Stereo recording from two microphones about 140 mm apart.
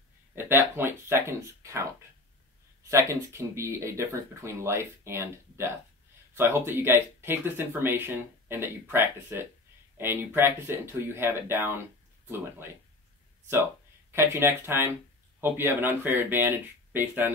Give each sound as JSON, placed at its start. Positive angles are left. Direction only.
{"t": 0.4, "sound": "speech", "side_deg": -15}
{"t": 2.8, "sound": "speech", "side_deg": -20}
{"t": 14.1, "sound": "speech", "side_deg": -15}